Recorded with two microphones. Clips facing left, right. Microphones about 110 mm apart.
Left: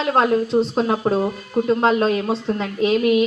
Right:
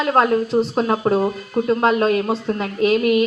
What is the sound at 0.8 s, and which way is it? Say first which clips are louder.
Speech: right 1 dB; 10° left (ahead or behind).